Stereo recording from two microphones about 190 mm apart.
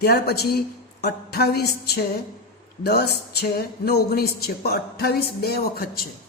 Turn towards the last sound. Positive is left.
turn(degrees=50)  # may be behind; listen again after turning